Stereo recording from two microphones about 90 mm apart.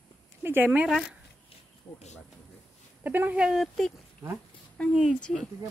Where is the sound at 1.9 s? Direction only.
20° left (ahead or behind).